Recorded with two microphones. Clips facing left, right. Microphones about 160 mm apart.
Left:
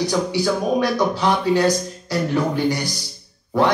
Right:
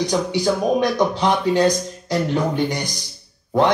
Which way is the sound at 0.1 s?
20° right (ahead or behind).